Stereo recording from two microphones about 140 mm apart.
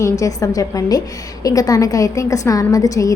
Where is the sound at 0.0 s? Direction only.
25° left (ahead or behind).